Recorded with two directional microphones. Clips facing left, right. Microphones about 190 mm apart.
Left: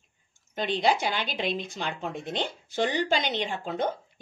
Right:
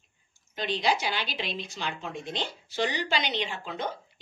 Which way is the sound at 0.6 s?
55° left (ahead or behind).